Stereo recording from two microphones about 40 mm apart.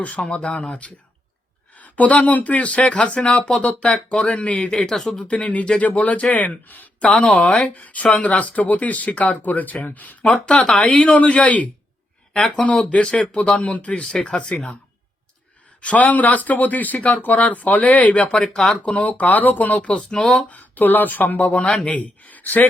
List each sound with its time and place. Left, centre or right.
0.2 s speech: left
0.4 s speech: left
4.5 s speech: centre
5.1 s speech: left
7.0 s speech: left
7.7 s speech: left
10.4 s speech: left
14.5 s speech: centre
15.8 s speech: left
18.3 s speech: centre
18.7 s speech: left
20.1 s speech: left
20.5 s speech: left